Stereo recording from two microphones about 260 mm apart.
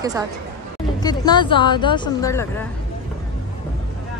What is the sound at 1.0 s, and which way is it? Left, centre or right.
Speech, centre.